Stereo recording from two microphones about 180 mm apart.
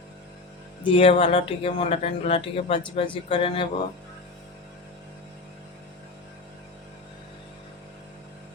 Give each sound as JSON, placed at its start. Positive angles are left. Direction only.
{"t": 0.9, "sound": "speech", "side_deg": 30}